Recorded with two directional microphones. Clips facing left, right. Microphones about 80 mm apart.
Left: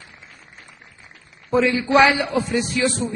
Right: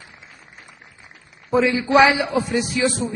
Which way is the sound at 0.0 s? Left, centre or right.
Centre.